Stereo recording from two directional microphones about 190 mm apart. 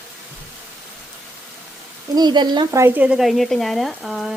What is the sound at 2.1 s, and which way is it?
Speech, 25° right (ahead or behind).